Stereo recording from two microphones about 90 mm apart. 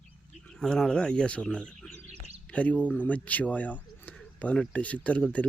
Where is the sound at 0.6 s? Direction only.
5° left (ahead or behind).